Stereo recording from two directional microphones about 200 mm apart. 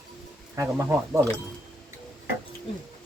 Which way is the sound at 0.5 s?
15° right (ahead or behind).